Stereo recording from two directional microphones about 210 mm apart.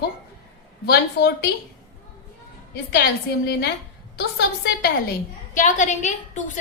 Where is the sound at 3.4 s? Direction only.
50° left (ahead or behind).